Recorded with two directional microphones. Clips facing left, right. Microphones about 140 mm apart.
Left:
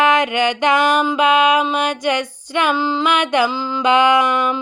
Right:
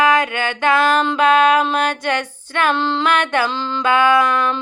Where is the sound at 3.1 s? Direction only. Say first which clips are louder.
Left 2 dB; 15° left (ahead or behind).